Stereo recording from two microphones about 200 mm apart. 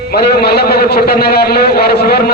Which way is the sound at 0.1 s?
50° left (ahead or behind).